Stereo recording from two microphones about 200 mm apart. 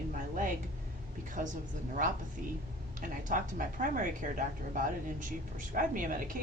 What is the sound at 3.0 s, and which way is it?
A woman's voice, 40° right (ahead or behind).